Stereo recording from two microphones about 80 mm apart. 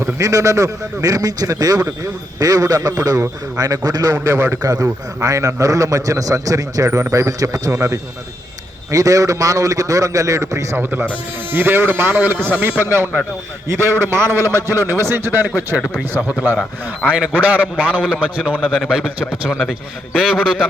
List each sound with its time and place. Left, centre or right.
0.2 s a man's voice: right
4.3 s speech: right
4.6 s a man's voice: right
10.8 s a man's voice: right
15.4 s speech: right
17.1 s a man's voice: centre
19.5 s a man's voice: centre